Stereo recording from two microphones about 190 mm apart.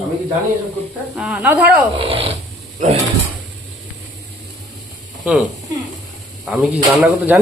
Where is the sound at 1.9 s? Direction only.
30° right (ahead or behind).